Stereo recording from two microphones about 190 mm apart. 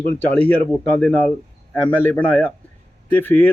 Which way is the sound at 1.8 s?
10° left (ahead or behind).